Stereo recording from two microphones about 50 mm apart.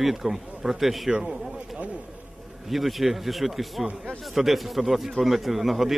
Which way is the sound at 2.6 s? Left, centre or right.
Centre.